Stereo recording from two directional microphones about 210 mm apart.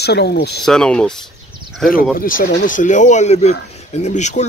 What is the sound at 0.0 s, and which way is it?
Speech, 50° left (ahead or behind).